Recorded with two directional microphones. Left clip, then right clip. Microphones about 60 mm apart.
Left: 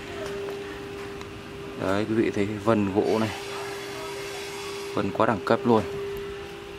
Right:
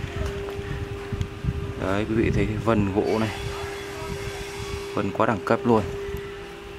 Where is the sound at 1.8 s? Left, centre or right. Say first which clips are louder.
Even; centre.